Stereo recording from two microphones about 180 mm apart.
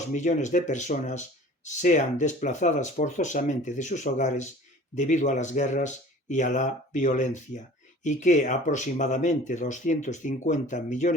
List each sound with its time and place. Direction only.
0.1 s speech: 40° left (ahead or behind)